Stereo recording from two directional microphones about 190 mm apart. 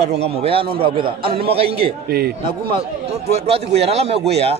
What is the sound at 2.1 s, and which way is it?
Speech, 55° right (ahead or behind).